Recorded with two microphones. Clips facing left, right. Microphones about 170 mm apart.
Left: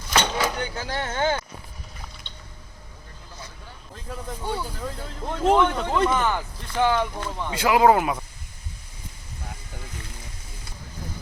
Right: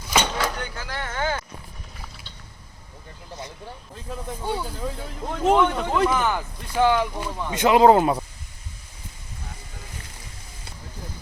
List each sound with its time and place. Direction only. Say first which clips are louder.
0.1 s a sound: even; centre (ahead or behind)
0.6 s speech: left 3 dB; 25° left (ahead or behind)
4.1 s speech: right 2 dB; 10° right (ahead or behind)
7.5 s speech: right 3 dB; 20° right (ahead or behind)